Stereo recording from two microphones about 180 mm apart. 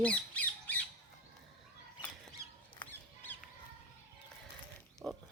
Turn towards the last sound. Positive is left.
turn(degrees=5)  # may be behind; listen again after turning